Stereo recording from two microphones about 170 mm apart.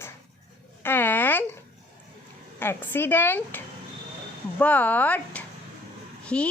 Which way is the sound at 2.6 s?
10° left (ahead or behind).